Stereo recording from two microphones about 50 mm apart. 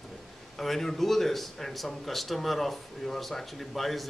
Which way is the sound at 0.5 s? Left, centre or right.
Centre.